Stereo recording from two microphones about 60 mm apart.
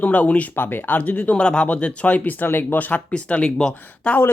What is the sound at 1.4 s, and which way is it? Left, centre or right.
Speech, centre.